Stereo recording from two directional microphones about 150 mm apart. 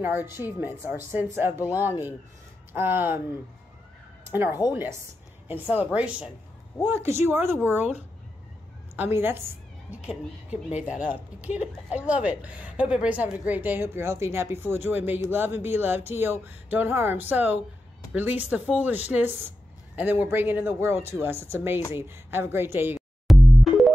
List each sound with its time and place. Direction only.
0.0 s a woman's voice: 15° right (ahead or behind)
4.5 s a woman's voice: 25° left (ahead or behind)
5.5 s a woman's voice: 10° right (ahead or behind)
23.2 s music: centre (ahead or behind)